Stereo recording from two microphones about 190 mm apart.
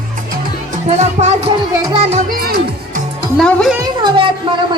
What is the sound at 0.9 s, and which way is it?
Speech, 35° right (ahead or behind).